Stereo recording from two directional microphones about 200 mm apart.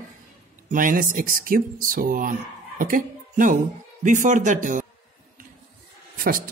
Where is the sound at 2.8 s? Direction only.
45° right (ahead or behind).